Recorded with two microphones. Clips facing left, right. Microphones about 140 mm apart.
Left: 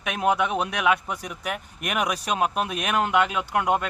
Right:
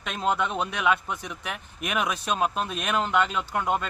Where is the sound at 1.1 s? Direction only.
60° left (ahead or behind).